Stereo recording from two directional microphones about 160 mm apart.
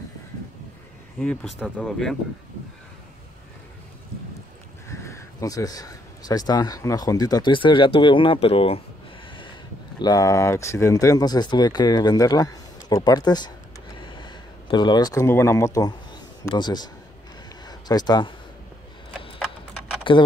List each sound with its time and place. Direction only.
1.2 s speech: 5° left (ahead or behind)
4.8 s speech: 20° left (ahead or behind); by 8.8 s 35° left (ahead or behind)
9.9 s speech: 25° left (ahead or behind)
17.6 s a sound: 25° left (ahead or behind)
20.0 s typing: 30° left (ahead or behind)